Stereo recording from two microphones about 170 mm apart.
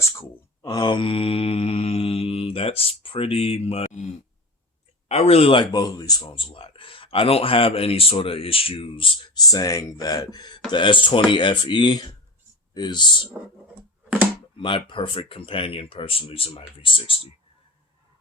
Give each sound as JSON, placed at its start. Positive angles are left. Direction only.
{"t": 0.0, "sound": "mantra", "side_deg": 20}
{"t": 5.0, "sound": "speech", "side_deg": 40}
{"t": 14.6, "sound": "speech", "side_deg": 30}